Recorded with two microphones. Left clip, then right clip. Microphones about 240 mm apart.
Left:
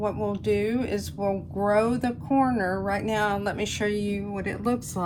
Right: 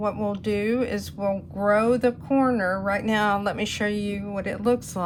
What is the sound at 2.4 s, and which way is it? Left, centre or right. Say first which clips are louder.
A woman's voice: right 3 dB; right.